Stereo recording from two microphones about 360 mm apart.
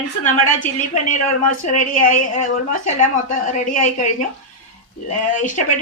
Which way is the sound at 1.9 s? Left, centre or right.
Left.